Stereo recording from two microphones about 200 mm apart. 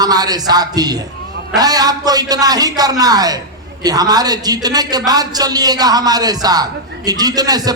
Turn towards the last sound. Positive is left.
turn(degrees=-20)  # may be behind; listen again after turning